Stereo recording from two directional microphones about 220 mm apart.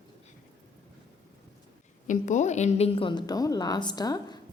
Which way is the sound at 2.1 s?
35° left (ahead or behind).